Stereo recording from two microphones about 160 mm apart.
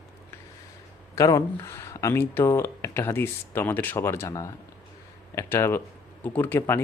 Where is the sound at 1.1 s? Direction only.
20° left (ahead or behind).